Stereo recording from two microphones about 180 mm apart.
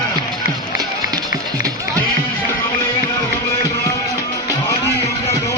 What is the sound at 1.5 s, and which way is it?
Music, 20° right (ahead or behind).